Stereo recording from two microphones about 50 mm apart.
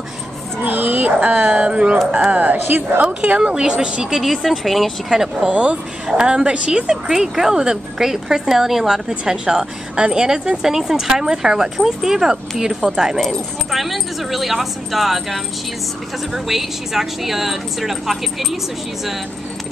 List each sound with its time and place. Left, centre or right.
0.7 s speech: right
2.3 s speech: right
3.3 s a woman's voice: centre
4.2 s speech: centre
5.5 s a woman's voice: right; by 18.6 s centre